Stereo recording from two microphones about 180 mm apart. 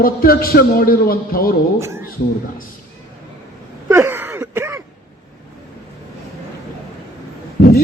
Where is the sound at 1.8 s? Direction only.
15° right (ahead or behind).